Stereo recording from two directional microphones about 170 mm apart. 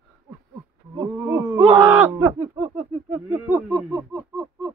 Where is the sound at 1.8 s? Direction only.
15° right (ahead or behind).